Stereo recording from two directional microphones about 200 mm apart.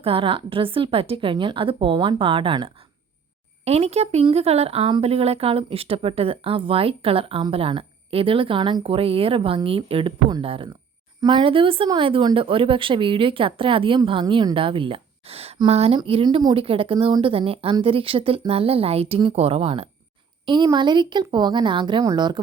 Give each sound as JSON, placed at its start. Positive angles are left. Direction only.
{"t": 0.0, "sound": "speech", "side_deg": -25}